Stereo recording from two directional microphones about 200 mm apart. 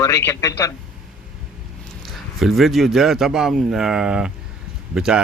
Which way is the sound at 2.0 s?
Centre (ahead or behind).